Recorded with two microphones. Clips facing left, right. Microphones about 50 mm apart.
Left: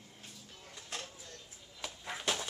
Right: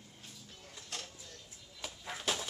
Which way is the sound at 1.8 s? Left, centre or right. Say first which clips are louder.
Left 1 dB; centre.